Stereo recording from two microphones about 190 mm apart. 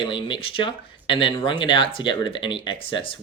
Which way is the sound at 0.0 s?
25° left (ahead or behind).